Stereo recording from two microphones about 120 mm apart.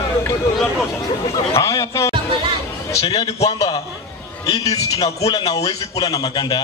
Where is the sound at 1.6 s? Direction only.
30° left (ahead or behind).